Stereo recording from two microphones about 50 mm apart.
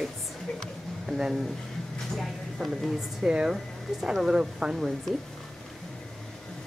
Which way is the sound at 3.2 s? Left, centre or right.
Centre.